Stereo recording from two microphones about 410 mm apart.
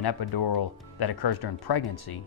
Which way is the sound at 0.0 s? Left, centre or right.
Left.